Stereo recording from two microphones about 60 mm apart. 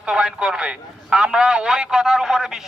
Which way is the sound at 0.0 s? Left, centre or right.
Centre.